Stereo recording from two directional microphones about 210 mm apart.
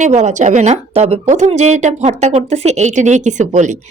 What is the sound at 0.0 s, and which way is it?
Speech, 35° right (ahead or behind).